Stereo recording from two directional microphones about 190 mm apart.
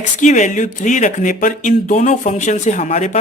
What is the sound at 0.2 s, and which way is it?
Speech, 40° left (ahead or behind).